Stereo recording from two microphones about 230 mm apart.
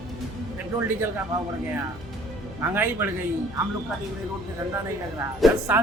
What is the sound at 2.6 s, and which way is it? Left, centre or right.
Speech, centre.